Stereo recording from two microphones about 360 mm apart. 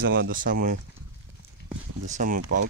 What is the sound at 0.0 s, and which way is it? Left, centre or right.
Speech, right.